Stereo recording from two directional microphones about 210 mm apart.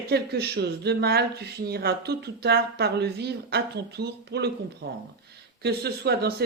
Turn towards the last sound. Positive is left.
turn(degrees=-50)  # may be behind; listen again after turning